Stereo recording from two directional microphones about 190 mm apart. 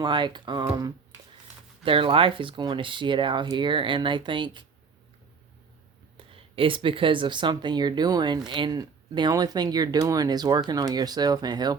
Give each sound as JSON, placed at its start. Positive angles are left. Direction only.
{"t": 0.0, "sound": "speech", "side_deg": -25}
{"t": 6.1, "sound": "speech", "side_deg": -30}